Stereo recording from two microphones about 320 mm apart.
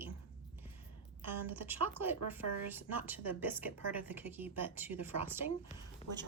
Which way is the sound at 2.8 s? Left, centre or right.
Centre.